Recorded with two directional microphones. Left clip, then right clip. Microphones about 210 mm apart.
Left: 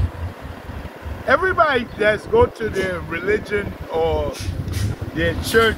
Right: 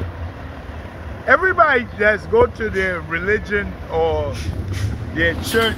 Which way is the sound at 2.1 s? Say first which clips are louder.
Right 1 dB; 10° left (ahead or behind).